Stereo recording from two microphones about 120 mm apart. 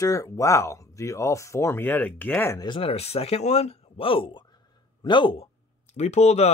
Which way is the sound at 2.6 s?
45° left (ahead or behind).